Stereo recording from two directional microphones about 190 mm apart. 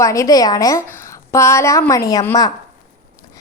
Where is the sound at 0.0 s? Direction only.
15° left (ahead or behind).